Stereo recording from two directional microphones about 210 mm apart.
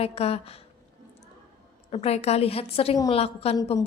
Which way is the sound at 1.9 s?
30° left (ahead or behind).